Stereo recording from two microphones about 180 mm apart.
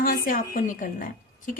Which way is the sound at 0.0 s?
50° left (ahead or behind).